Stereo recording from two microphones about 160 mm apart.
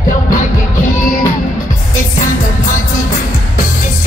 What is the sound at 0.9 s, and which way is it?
Music, 60° left (ahead or behind).